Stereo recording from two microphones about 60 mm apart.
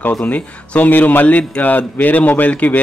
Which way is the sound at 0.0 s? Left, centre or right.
Left.